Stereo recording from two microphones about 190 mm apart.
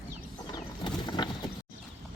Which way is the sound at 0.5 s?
20° left (ahead or behind).